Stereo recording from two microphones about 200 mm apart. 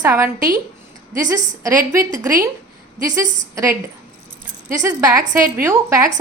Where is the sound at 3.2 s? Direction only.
40° right (ahead or behind).